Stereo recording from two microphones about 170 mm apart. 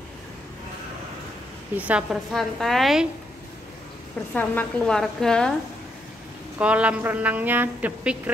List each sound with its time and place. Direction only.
1.8 s a woman's voice: 5° right (ahead or behind)
4.3 s a woman's voice: 10° left (ahead or behind)
6.6 s a woman's voice: 5° right (ahead or behind)